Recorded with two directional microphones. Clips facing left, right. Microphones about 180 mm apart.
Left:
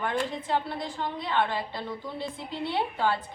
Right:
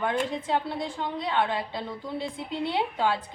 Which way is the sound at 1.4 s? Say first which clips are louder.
Even; 20° right (ahead or behind).